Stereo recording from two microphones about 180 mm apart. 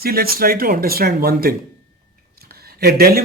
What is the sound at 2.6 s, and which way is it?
Speech, 60° right (ahead or behind).